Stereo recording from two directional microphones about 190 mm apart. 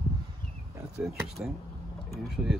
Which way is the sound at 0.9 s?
5° right (ahead or behind).